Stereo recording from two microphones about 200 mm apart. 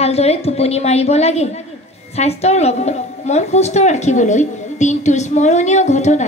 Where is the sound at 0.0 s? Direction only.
30° left (ahead or behind).